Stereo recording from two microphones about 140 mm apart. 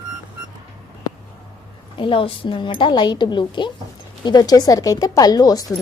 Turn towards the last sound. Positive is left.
turn(degrees=25)  # may be behind; listen again after turning